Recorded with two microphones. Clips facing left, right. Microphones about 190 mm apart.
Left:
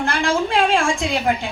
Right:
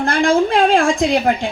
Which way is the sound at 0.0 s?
35° right (ahead or behind).